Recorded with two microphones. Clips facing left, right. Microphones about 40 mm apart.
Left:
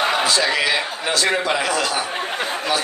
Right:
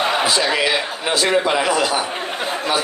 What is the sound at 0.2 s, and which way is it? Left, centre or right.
A man's voice, centre.